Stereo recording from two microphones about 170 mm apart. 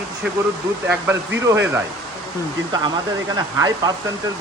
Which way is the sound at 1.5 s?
15° right (ahead or behind).